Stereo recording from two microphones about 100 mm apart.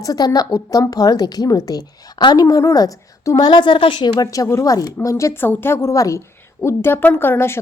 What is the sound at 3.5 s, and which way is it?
Speech, 55° left (ahead or behind).